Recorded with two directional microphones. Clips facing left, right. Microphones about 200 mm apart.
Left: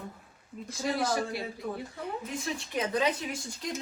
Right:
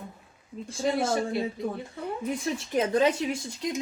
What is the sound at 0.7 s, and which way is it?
Speech, 30° right (ahead or behind).